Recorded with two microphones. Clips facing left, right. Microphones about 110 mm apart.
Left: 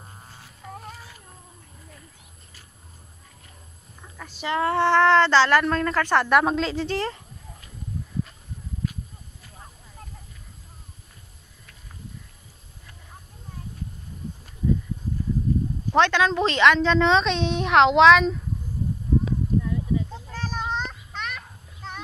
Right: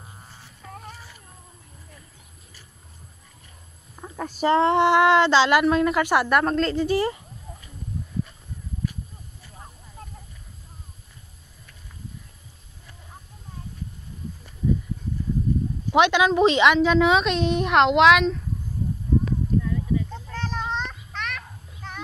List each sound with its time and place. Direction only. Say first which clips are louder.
0.7 s a sound: left 1 dB; centre (ahead or behind)
4.0 s speech: right 10 dB; 45° right (ahead or behind)
4.6 s a woman's voice: right 1 dB; 20° right (ahead or behind)
6.3 s a woman's voice: even; centre (ahead or behind)
15.9 s a woman's voice: right 2 dB; 15° right (ahead or behind)
19.2 s a sound: even; 15° left (ahead or behind)